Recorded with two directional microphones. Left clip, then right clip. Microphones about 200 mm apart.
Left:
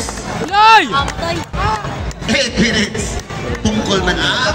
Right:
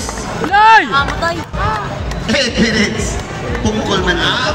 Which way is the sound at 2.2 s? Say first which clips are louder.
Right 1 dB; 30° left (ahead or behind).